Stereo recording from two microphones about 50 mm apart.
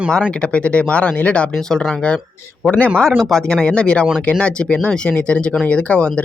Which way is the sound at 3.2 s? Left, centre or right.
Centre.